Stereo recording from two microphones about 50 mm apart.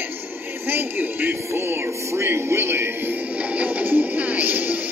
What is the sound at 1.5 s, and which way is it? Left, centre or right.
Music, right.